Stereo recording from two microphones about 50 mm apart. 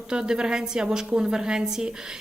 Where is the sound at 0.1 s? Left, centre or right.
Centre.